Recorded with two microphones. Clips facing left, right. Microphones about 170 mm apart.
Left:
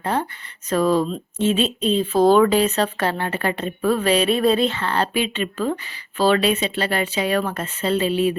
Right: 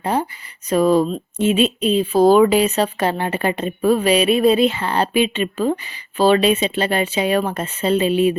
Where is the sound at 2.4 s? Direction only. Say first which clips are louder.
Right 2 dB; 15° right (ahead or behind).